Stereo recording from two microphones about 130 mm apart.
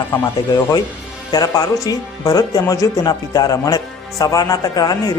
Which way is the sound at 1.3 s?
30° left (ahead or behind).